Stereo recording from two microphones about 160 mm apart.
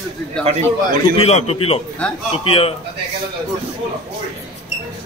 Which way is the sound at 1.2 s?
40° left (ahead or behind).